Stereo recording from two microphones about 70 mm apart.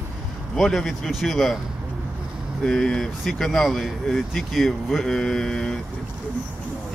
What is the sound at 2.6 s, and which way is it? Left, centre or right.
A man's voice, centre.